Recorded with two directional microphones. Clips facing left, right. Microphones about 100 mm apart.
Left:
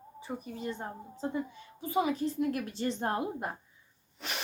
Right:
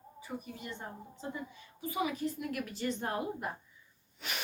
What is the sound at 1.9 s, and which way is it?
A woman's voice, 30° left (ahead or behind).